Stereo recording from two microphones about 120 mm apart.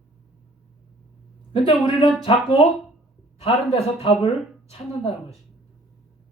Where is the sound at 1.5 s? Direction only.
45° left (ahead or behind).